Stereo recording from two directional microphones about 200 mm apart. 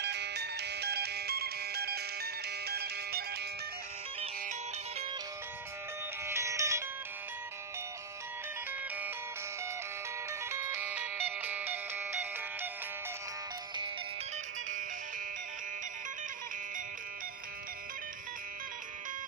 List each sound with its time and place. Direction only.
0.0 s music: 55° right (ahead or behind)
6.2 s music: 15° right (ahead or behind)
10.5 s music: 10° right (ahead or behind)